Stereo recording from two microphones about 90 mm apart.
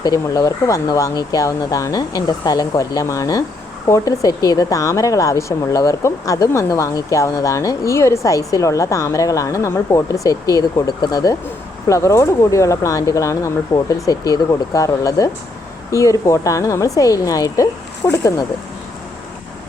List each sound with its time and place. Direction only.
0.0 s speech: 45° left (ahead or behind)
11.9 s speech: 35° left (ahead or behind)